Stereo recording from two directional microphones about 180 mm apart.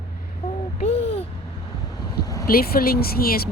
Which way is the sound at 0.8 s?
35° left (ahead or behind).